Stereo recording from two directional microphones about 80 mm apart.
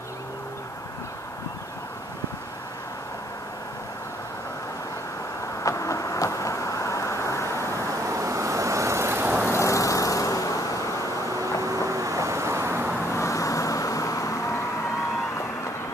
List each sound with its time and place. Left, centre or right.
5.6 s vehicle: left
8.1 s vehicle: right
9.5 s vehicle: left
11.9 s vehicle: right
13.1 s vehicle: left